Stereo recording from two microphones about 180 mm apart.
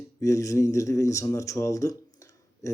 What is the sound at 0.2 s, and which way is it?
Speech, 15° left (ahead or behind).